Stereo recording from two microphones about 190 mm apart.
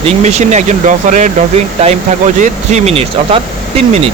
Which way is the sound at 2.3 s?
40° right (ahead or behind).